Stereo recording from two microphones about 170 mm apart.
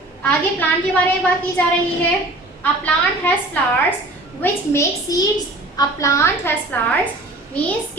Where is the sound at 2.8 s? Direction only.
10° left (ahead or behind).